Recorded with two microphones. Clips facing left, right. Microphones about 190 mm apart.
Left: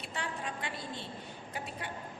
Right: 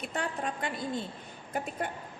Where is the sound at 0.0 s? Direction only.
45° right (ahead or behind).